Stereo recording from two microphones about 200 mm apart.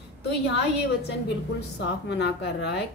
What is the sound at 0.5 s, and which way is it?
A woman's voice, 60° left (ahead or behind).